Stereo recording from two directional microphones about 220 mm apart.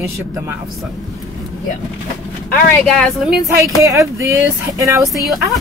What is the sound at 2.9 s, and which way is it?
Speech, centre (ahead or behind).